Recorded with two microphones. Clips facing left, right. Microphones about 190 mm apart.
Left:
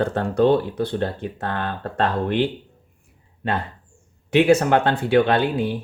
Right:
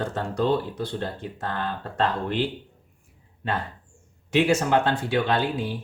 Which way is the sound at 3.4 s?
60° left (ahead or behind).